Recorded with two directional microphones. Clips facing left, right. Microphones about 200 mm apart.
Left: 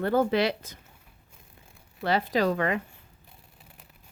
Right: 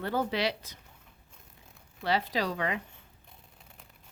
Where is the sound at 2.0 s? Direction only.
50° left (ahead or behind).